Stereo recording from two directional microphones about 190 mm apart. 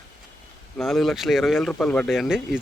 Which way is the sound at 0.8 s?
Centre (ahead or behind).